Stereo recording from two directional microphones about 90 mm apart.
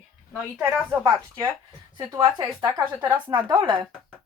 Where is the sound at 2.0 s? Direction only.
45° right (ahead or behind).